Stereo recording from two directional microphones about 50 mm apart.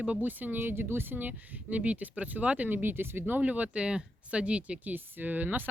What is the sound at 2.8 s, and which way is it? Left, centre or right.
Speech, right.